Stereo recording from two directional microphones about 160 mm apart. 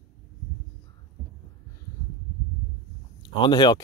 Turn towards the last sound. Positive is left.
turn(degrees=30)  # may be behind; listen again after turning